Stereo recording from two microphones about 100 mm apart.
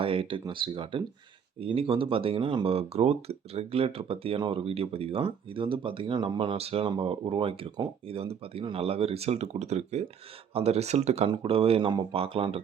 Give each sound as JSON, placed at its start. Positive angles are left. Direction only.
{"t": 0.0, "sound": "speech", "side_deg": -65}
{"t": 1.5, "sound": "speech", "side_deg": -65}
{"t": 6.8, "sound": "speech", "side_deg": -60}
{"t": 8.0, "sound": "speech", "side_deg": -70}